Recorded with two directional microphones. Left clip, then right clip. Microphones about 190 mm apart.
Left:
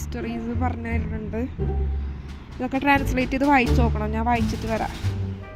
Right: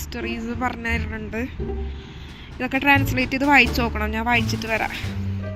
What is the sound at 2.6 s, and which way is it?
Speech, centre (ahead or behind).